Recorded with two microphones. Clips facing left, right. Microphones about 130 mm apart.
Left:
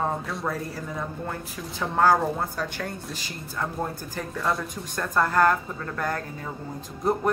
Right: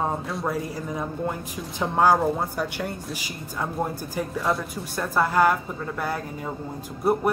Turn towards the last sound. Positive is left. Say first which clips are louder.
# right 2 dB
turn(degrees=-10)  # may be behind; listen again after turning